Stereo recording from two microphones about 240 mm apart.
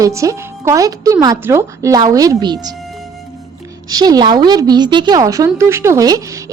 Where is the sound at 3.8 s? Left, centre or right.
Centre.